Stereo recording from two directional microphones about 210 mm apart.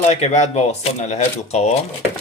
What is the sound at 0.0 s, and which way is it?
Speech, 30° left (ahead or behind).